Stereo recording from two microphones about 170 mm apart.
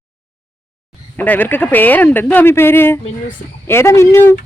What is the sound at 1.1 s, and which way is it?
Speech, 10° left (ahead or behind).